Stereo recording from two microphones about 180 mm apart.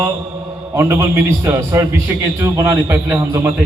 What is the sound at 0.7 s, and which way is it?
A man's voice, 15° right (ahead or behind).